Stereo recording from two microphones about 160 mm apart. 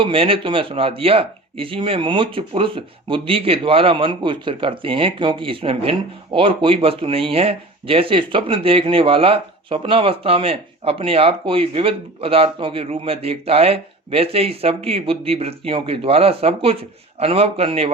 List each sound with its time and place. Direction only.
0.0 s speech: 35° right (ahead or behind)